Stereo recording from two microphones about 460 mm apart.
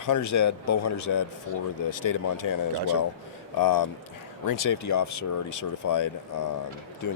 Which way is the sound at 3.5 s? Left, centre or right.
Left.